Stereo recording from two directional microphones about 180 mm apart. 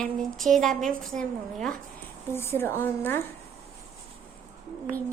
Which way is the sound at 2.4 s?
15° left (ahead or behind).